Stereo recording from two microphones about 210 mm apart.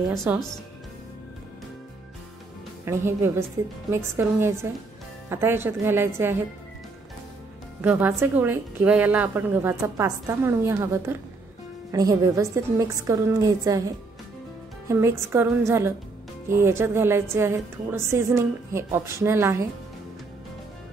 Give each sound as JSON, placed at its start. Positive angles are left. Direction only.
{"t": 0.1, "sound": "a woman's voice", "side_deg": -10}
{"t": 2.8, "sound": "a woman's voice", "side_deg": -10}
{"t": 7.8, "sound": "a woman's voice", "side_deg": -10}